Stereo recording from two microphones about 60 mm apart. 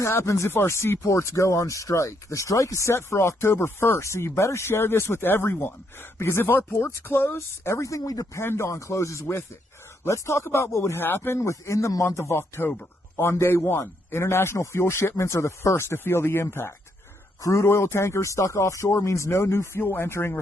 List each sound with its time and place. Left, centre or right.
0.0 s speech: left
8.4 s speech: left
11.3 s speech: left
17.4 s speech: left